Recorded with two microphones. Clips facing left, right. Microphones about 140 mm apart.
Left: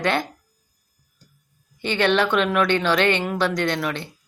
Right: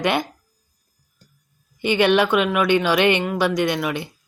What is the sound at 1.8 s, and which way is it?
Speech, 10° right (ahead or behind).